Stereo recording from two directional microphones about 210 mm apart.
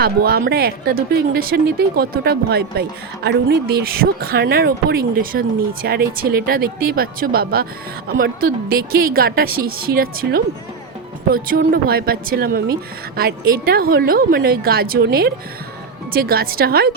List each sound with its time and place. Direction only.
0.0 s speech: 45° right (ahead or behind)